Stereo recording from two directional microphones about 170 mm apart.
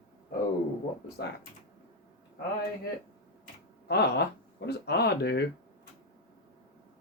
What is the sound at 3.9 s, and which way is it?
Speech, 75° left (ahead or behind).